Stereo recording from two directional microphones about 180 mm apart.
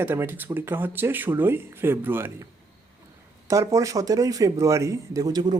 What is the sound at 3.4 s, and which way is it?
Speech, 15° right (ahead or behind).